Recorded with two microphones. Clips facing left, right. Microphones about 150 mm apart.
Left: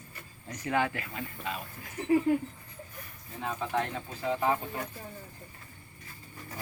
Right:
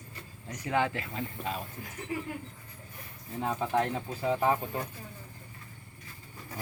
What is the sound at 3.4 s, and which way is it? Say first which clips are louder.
Speech: right 3 dB; 15° right (ahead or behind).